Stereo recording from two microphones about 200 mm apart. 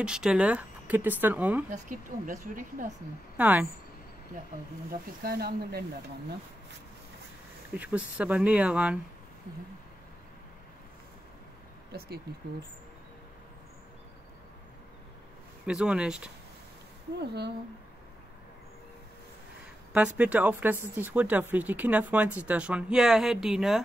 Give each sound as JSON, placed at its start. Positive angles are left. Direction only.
{"t": 0.0, "sound": "speech", "side_deg": -5}
{"t": 1.9, "sound": "speech", "side_deg": -40}
{"t": 3.3, "sound": "speech", "side_deg": -10}
{"t": 5.2, "sound": "speech", "side_deg": -50}
{"t": 7.7, "sound": "speech", "side_deg": -5}
{"t": 11.9, "sound": "speech", "side_deg": -50}
{"t": 15.6, "sound": "speech", "side_deg": -5}
{"t": 17.2, "sound": "speech", "side_deg": -55}
{"t": 20.2, "sound": "speech", "side_deg": -5}